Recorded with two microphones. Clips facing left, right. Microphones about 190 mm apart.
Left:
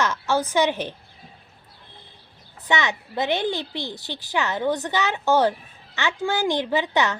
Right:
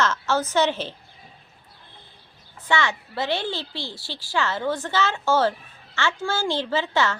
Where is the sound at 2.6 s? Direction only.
20° left (ahead or behind).